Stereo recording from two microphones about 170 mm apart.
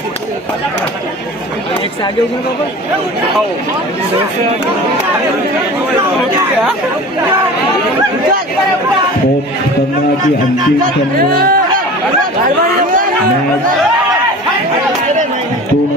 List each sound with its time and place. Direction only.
11.3 s speech: 60° right (ahead or behind)